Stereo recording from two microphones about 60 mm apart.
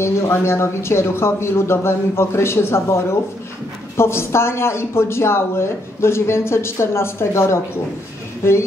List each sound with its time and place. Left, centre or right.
0.0 s speech: left